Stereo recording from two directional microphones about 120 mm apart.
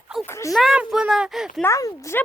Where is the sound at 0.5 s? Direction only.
Centre (ahead or behind).